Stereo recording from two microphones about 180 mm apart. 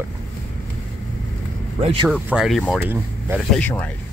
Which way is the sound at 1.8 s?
35° right (ahead or behind).